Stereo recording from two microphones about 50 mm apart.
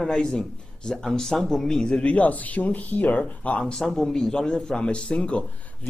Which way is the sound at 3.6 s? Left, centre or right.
Centre.